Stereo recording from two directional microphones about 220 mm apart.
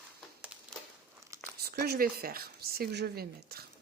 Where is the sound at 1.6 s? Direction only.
45° right (ahead or behind).